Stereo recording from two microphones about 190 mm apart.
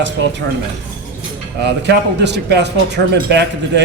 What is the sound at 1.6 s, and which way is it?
Speech, 65° right (ahead or behind).